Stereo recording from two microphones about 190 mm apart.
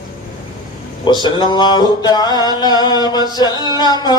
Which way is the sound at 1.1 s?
25° left (ahead or behind).